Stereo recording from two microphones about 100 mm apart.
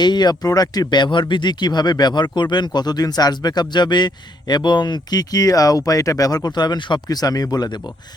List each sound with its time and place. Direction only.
0.0 s speech: 45° left (ahead or behind)